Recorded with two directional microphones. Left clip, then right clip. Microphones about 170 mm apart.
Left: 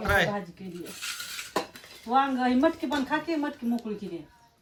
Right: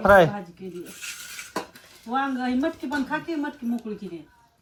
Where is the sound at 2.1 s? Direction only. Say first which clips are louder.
Left 2 dB; 40° left (ahead or behind).